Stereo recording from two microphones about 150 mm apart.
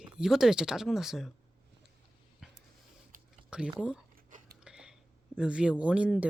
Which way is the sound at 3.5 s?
5° right (ahead or behind).